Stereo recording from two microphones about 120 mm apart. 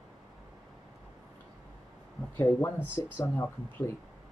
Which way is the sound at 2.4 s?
20° left (ahead or behind).